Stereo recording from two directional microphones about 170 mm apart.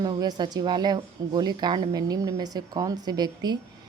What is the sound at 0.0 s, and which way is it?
Speech, 25° right (ahead or behind).